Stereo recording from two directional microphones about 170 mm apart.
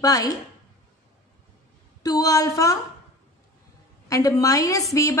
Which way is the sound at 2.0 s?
20° left (ahead or behind).